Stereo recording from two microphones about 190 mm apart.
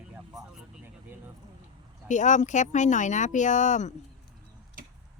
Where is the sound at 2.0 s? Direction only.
40° left (ahead or behind).